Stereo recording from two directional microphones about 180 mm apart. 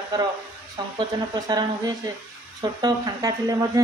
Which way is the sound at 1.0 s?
20° right (ahead or behind).